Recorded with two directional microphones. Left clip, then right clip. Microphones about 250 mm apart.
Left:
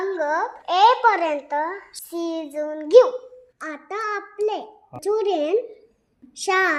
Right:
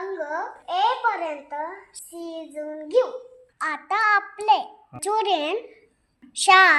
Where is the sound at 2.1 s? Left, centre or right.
Left.